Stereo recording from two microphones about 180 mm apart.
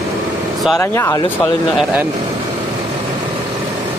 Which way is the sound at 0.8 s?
15° left (ahead or behind).